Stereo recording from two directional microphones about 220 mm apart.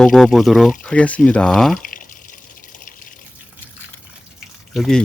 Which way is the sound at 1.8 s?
40° left (ahead or behind).